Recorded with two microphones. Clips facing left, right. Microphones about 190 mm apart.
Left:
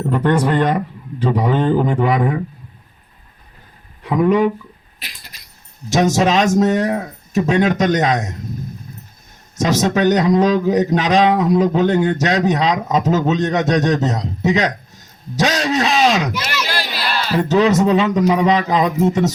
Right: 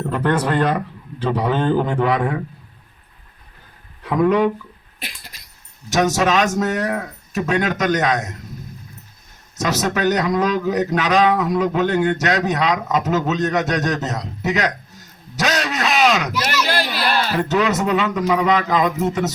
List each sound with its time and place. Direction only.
0.1 s speech: 15° left (ahead or behind)
4.0 s speech: 15° left (ahead or behind)
5.9 s speech: 30° left (ahead or behind)
9.6 s a man's voice: 30° left (ahead or behind)
16.4 s a sound: 50° right (ahead or behind)
17.3 s a man's voice: 30° left (ahead or behind)